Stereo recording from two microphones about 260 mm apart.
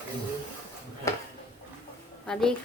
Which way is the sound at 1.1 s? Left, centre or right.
Centre.